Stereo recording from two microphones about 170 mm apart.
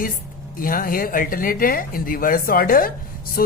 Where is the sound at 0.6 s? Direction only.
55° left (ahead or behind).